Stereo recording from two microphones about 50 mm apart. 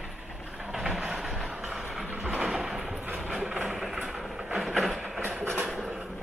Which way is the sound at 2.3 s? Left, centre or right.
Centre.